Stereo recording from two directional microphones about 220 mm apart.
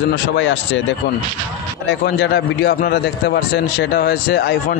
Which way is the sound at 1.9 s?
50° left (ahead or behind).